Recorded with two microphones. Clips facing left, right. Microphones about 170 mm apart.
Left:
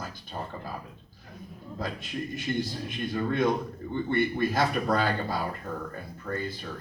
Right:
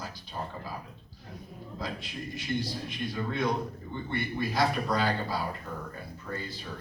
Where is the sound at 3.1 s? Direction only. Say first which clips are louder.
Left 5 dB; 50° left (ahead or behind).